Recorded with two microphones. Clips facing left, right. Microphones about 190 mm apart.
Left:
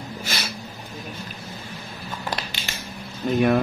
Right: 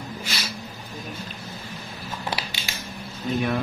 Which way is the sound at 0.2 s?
50° left (ahead or behind).